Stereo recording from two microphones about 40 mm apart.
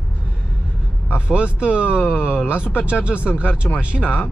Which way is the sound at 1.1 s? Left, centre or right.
Right.